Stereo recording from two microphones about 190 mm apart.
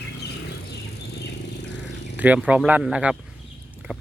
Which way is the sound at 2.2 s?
5° right (ahead or behind).